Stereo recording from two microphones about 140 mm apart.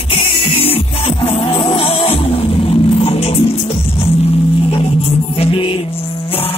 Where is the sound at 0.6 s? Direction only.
45° left (ahead or behind).